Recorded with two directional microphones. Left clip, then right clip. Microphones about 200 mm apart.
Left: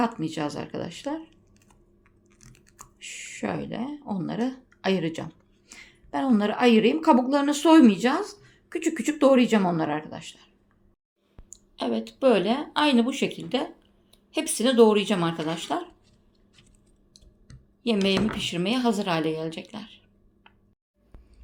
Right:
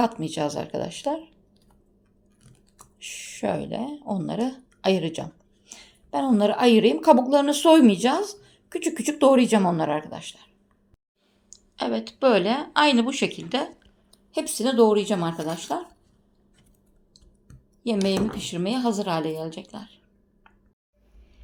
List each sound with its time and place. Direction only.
0.0 s speech: 5° right (ahead or behind)
3.0 s speech: 5° right (ahead or behind)
11.5 s speech: 5° left (ahead or behind)
17.8 s speech: centre (ahead or behind)